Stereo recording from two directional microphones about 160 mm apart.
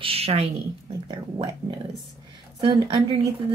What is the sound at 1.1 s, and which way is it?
Speech, 25° right (ahead or behind).